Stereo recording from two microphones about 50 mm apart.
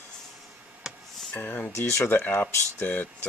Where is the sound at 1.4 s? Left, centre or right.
Left.